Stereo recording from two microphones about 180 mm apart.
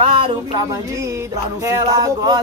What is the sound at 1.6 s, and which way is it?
Speech, 20° right (ahead or behind).